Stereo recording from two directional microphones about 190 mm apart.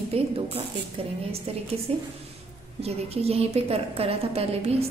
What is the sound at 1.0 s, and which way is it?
A woman's voice, 30° right (ahead or behind).